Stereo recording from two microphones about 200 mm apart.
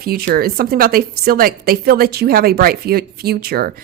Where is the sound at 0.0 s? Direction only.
50° right (ahead or behind).